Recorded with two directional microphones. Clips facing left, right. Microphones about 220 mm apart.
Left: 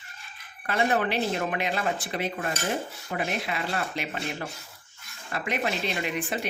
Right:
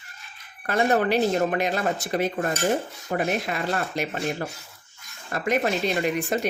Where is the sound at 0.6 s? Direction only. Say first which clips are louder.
Right 4 dB; 40° right (ahead or behind).